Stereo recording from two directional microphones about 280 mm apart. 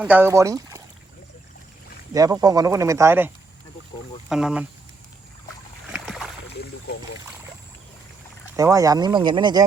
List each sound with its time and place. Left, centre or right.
0.0 s speech: centre
2.1 s speech: centre
5.9 s boat: centre
6.5 s boat: left
8.5 s speech: centre